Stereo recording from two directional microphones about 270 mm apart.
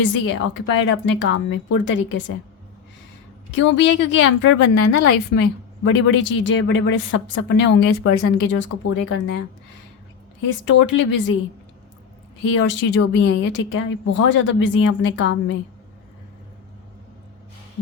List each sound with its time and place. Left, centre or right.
0.0 s speech: left
3.5 s speech: left
10.7 s speech: left
12.5 s speech: left